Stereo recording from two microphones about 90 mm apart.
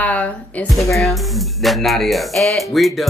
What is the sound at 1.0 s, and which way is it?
Speech, centre (ahead or behind).